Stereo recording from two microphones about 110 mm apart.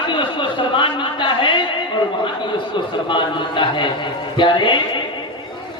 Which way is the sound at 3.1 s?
50° left (ahead or behind).